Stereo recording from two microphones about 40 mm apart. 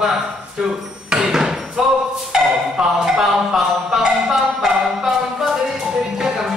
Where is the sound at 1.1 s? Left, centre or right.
Centre.